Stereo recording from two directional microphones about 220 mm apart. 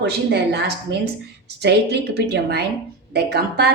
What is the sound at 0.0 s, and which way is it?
A woman's voice, 50° right (ahead or behind).